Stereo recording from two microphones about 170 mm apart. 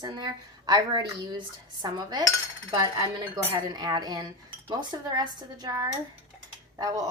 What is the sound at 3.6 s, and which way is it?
A woman's voice, 25° right (ahead or behind).